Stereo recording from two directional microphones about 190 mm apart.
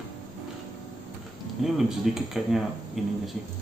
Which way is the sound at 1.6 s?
Centre (ahead or behind).